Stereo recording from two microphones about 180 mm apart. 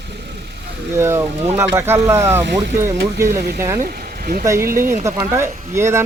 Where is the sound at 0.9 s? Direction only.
15° right (ahead or behind).